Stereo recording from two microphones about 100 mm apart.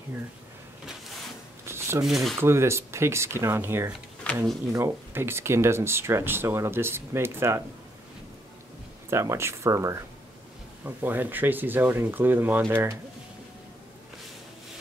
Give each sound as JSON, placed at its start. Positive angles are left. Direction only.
{"t": 1.7, "sound": "shuffling cards", "side_deg": -25}
{"t": 2.0, "sound": "speech", "side_deg": 0}
{"t": 2.3, "sound": "speech", "side_deg": -25}
{"t": 4.2, "sound": "a sound", "side_deg": 10}
{"t": 5.1, "sound": "speech", "side_deg": -25}
{"t": 9.1, "sound": "speech", "side_deg": -30}
{"t": 11.0, "sound": "speech", "side_deg": -20}